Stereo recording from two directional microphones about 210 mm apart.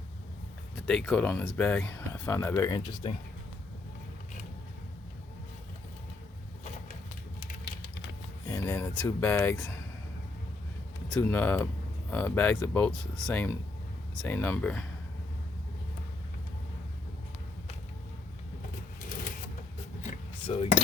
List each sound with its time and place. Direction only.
0.9 s speech: 5° left (ahead or behind); by 3.2 s 20° left (ahead or behind)
8.4 s speech: 15° left (ahead or behind)
11.2 s speech: 10° left (ahead or behind)
20.0 s keys jangling: 30° left (ahead or behind)